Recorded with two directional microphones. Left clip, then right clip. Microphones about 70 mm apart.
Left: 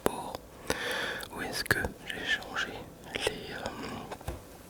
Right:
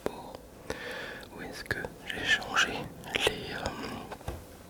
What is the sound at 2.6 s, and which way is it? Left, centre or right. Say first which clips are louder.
Whispering: right 7 dB; right.